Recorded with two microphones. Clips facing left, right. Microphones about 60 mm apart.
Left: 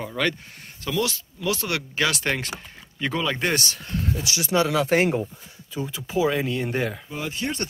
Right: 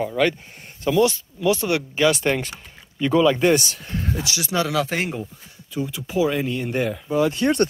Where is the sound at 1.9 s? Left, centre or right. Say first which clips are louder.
Right 5 dB; centre.